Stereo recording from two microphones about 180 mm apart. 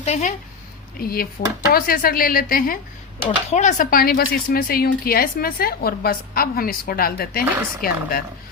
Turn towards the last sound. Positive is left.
turn(degrees=55)  # may be behind; listen again after turning